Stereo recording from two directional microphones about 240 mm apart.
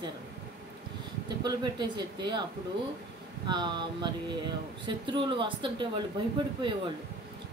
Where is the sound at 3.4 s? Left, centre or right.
Centre.